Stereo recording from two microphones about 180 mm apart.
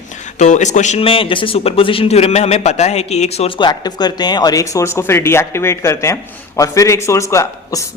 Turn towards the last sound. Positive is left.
turn(degrees=15)  # may be behind; listen again after turning